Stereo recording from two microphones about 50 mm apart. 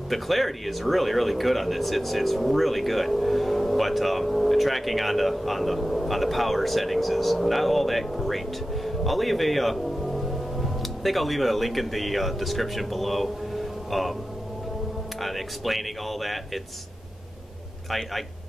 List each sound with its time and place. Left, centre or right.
0.1 s speech: centre
15.1 s speech: centre